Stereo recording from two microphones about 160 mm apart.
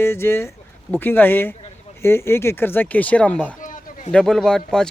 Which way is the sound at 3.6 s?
55° left (ahead or behind).